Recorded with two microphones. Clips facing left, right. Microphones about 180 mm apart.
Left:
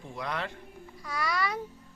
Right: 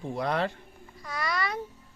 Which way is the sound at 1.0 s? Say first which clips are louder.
Even; 5° left (ahead or behind).